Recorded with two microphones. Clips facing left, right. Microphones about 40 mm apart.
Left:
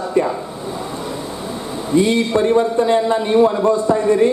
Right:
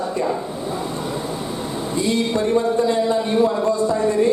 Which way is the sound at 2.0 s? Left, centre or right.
Left.